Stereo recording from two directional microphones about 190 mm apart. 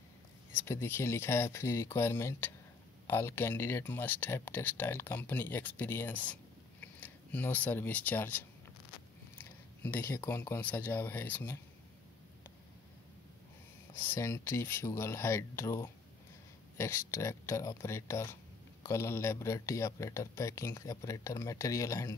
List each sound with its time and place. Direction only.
0.6 s speech: 15° left (ahead or behind)
14.0 s speech: 15° left (ahead or behind)